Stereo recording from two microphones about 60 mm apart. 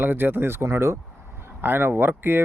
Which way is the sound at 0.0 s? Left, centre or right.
Right.